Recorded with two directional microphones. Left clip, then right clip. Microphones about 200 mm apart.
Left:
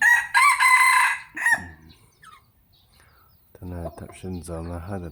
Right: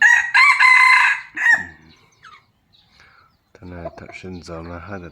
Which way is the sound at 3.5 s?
Centre (ahead or behind).